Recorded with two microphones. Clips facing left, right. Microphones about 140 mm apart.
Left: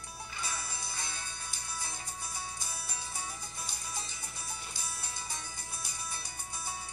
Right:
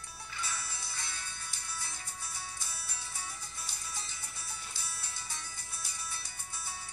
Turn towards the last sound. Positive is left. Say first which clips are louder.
# left 3 dB
turn(degrees=15)  # may be behind; listen again after turning